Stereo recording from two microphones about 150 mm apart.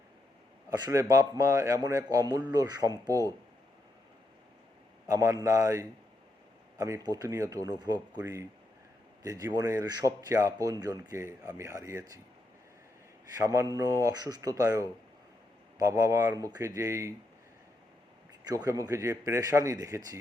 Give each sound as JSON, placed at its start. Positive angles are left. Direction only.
{"t": 0.7, "sound": "speech", "side_deg": -25}
{"t": 5.0, "sound": "speech", "side_deg": -20}
{"t": 13.3, "sound": "speech", "side_deg": -20}
{"t": 18.4, "sound": "speech", "side_deg": -20}